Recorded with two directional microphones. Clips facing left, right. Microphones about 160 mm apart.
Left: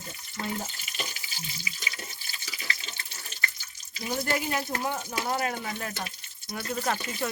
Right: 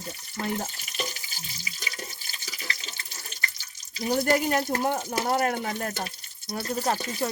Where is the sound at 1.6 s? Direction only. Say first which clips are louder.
Right 5 dB; 40° right (ahead or behind).